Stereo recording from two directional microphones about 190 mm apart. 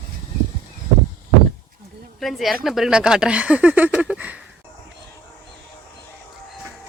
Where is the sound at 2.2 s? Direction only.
Centre (ahead or behind).